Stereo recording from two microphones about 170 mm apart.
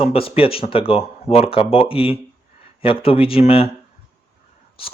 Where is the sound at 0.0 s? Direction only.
35° left (ahead or behind).